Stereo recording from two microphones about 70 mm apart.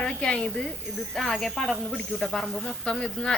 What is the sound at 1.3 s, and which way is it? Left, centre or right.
Speech, centre.